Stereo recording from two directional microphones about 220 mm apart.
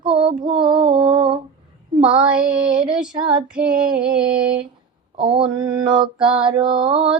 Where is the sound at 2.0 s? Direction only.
5° right (ahead or behind).